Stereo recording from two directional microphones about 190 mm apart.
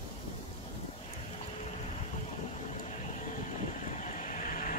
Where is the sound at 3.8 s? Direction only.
40° left (ahead or behind).